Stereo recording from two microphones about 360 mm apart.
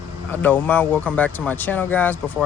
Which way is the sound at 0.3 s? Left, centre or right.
Centre.